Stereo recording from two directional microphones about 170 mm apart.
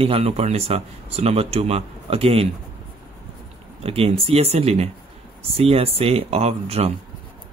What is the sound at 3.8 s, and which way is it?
Speech, 35° right (ahead or behind).